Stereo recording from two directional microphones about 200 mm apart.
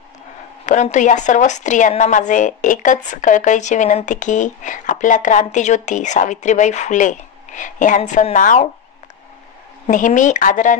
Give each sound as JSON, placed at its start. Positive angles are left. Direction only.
{"t": 0.7, "sound": "a woman's voice", "side_deg": 40}
{"t": 9.8, "sound": "a woman's voice", "side_deg": 40}